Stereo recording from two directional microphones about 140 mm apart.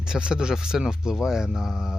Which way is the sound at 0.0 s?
5° right (ahead or behind).